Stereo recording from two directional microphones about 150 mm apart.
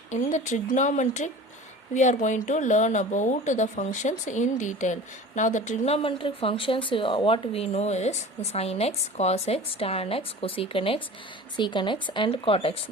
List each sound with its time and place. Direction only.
0.1 s a woman's voice: 55° left (ahead or behind)